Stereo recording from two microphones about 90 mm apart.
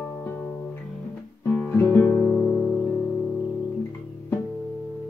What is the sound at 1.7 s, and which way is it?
Guitar, 25° left (ahead or behind).